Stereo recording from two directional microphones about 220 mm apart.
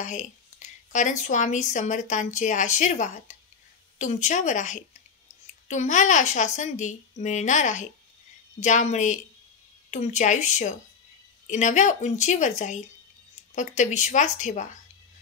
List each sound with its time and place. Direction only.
0.0 s a woman's voice: 35° left (ahead or behind)